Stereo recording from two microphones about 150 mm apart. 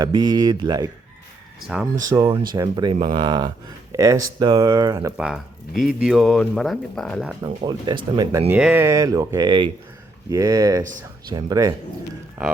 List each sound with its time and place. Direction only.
0.0 s speech: 25° right (ahead or behind)
1.6 s speech: 5° right (ahead or behind)
2.0 s speech: 20° right (ahead or behind)
5.1 s speech: 5° right (ahead or behind)
7.4 s speech: 30° right (ahead or behind)
8.5 s speech: 10° right (ahead or behind); by 11.7 s 25° right (ahead or behind)